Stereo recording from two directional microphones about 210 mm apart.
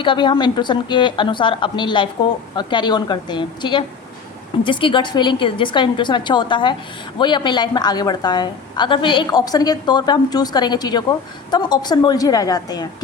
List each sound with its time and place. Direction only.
0.0 s a woman's voice: 20° left (ahead or behind)